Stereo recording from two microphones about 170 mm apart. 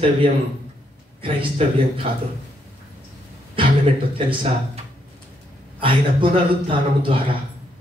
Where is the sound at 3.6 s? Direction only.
30° right (ahead or behind).